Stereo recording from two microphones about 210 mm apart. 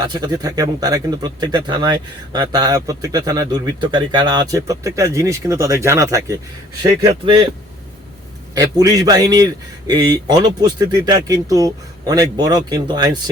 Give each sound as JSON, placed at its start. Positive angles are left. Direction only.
{"t": 0.0, "sound": "a man's voice", "side_deg": -20}
{"t": 8.5, "sound": "a man's voice", "side_deg": -15}